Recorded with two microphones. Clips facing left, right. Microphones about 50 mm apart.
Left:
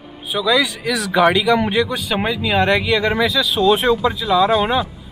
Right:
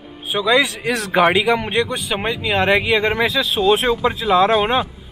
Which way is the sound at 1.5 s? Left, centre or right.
Centre.